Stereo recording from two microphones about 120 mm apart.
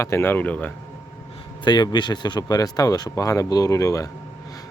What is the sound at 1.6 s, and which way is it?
Speech, 40° left (ahead or behind).